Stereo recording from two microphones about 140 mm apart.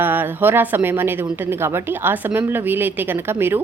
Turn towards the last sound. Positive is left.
turn(degrees=-15)  # may be behind; listen again after turning